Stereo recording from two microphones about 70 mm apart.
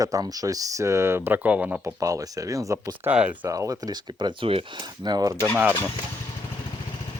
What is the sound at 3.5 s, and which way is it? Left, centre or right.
Speech, right.